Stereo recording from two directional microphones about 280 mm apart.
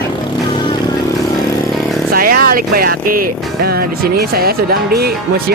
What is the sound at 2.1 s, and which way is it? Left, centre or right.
Speech, right.